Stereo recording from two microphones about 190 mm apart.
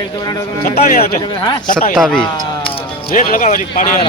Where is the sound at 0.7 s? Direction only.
50° left (ahead or behind).